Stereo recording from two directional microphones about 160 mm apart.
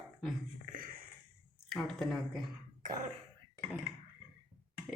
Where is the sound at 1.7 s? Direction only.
Centre (ahead or behind).